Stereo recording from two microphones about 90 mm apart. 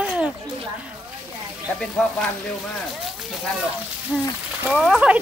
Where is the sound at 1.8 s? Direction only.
10° left (ahead or behind).